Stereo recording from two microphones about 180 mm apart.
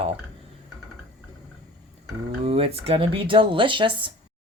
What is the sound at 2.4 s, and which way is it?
Speech, 35° right (ahead or behind).